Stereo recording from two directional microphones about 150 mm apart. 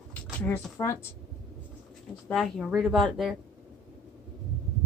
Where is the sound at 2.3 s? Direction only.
Centre (ahead or behind).